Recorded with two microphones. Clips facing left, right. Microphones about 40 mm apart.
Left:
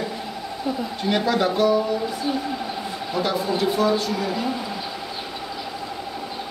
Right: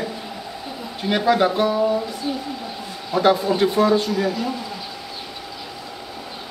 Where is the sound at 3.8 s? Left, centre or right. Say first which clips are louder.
Right 3 dB; right.